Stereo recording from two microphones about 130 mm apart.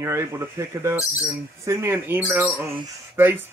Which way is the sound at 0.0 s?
20° right (ahead or behind).